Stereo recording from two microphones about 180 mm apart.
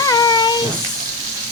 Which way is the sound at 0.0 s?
20° left (ahead or behind).